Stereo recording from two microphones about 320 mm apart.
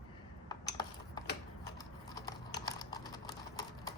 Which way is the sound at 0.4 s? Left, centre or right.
Centre.